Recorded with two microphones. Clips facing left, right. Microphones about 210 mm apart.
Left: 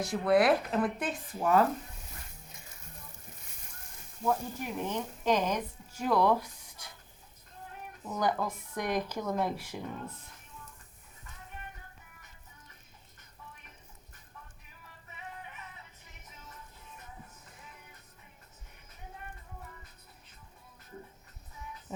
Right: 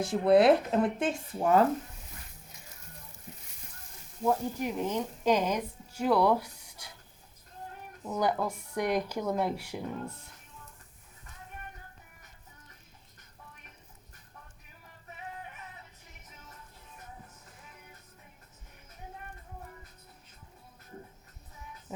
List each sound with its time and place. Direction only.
0.0 s speech: 25° right (ahead or behind)
4.3 s speech: 15° right (ahead or behind)
8.1 s speech: 10° right (ahead or behind)